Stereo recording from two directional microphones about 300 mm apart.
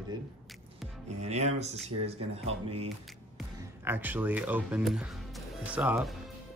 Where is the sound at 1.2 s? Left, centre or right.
Right.